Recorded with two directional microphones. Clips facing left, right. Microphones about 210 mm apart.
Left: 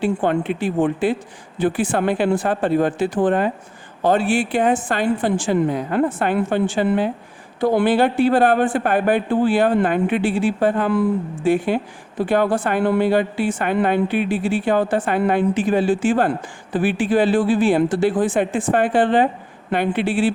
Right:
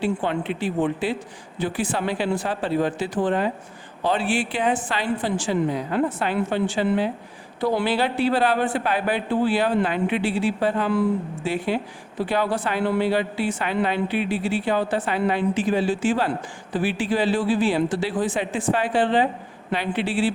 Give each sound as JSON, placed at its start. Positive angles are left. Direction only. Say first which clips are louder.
{"t": 0.0, "sound": "a woman's voice", "louder": "left 5 dB", "side_deg": 50}